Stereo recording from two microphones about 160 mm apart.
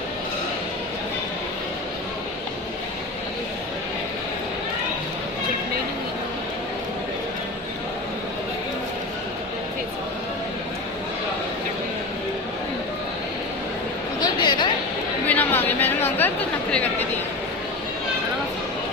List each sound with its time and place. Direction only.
14.2 s a sound: 25° left (ahead or behind)
15.3 s chatter: 10° left (ahead or behind)
16.7 s speech: 10° left (ahead or behind)